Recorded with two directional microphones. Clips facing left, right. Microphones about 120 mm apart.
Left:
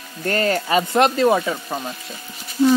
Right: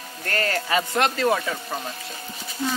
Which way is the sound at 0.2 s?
20° left (ahead or behind).